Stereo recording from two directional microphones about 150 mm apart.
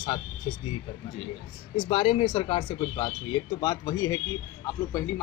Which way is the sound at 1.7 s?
35° left (ahead or behind).